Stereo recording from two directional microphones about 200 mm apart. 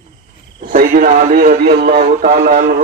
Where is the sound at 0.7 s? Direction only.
45° right (ahead or behind).